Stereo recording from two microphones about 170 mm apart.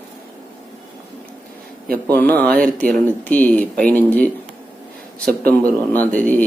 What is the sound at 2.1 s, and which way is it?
Speech, 10° left (ahead or behind).